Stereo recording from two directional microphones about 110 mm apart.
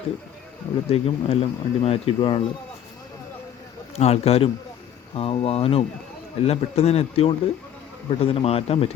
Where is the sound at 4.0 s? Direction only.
70° left (ahead or behind).